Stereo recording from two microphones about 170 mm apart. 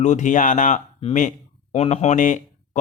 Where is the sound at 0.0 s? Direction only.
45° left (ahead or behind).